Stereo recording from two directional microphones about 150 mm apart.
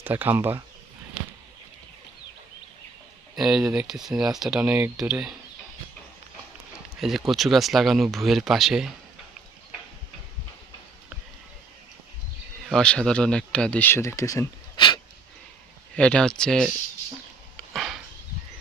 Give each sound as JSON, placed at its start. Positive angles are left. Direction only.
{"t": 0.0, "sound": "speech", "side_deg": -15}
{"t": 3.3, "sound": "speech", "side_deg": -5}
{"t": 7.0, "sound": "speech", "side_deg": 0}
{"t": 12.6, "sound": "speech", "side_deg": 5}
{"t": 14.8, "sound": "wheeze", "side_deg": 30}
{"t": 16.0, "sound": "speech", "side_deg": 5}
{"t": 17.7, "sound": "dog", "side_deg": 0}